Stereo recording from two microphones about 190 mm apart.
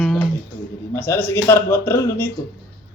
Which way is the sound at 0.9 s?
10° left (ahead or behind).